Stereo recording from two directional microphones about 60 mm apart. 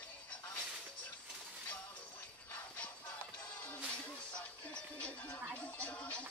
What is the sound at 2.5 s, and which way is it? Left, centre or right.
Music, left.